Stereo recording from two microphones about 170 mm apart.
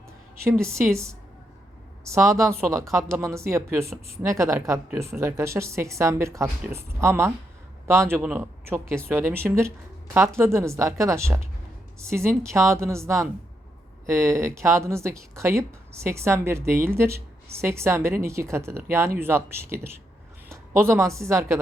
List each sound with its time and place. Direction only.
0.6 s speech: 15° right (ahead or behind)
2.1 s speech: 20° right (ahead or behind)